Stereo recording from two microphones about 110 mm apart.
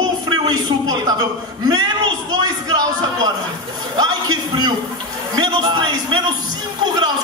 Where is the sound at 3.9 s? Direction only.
40° right (ahead or behind).